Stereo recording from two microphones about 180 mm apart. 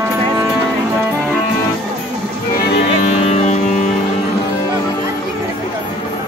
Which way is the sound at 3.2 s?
40° left (ahead or behind).